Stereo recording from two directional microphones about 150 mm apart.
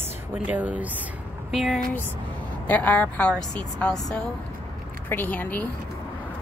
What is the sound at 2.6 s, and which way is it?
Speech, 10° left (ahead or behind).